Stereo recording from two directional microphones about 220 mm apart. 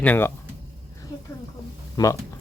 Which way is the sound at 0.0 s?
10° left (ahead or behind).